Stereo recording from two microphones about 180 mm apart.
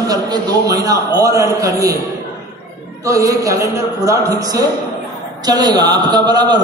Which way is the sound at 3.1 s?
20° right (ahead or behind).